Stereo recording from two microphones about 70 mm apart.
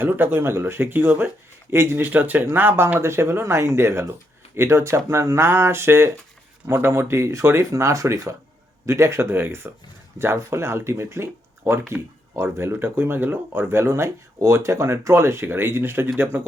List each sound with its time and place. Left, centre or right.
0.0 s speech: right